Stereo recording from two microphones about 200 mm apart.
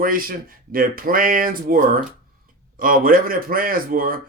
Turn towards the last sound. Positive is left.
turn(degrees=-45)  # may be behind; listen again after turning